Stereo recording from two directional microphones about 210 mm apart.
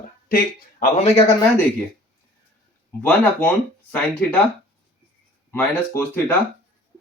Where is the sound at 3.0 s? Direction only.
5° left (ahead or behind).